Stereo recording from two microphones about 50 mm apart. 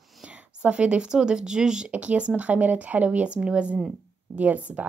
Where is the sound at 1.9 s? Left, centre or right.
Right.